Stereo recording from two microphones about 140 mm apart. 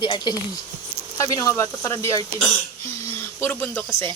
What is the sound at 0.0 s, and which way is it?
Speech, 30° left (ahead or behind).